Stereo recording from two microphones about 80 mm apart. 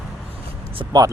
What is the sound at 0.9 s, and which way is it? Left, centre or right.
Speech, right.